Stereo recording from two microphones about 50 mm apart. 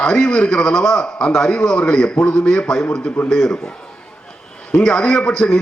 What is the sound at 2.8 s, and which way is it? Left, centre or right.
Speech, left.